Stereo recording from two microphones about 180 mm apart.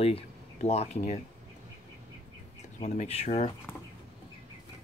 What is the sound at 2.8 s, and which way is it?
Speech, 40° left (ahead or behind).